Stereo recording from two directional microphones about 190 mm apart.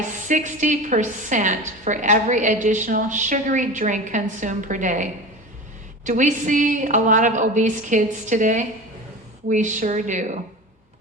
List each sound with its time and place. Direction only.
0.3 s a woman's voice: 40° right (ahead or behind)